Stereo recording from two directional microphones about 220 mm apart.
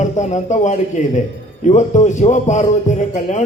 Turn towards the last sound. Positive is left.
turn(degrees=35)  # may be behind; listen again after turning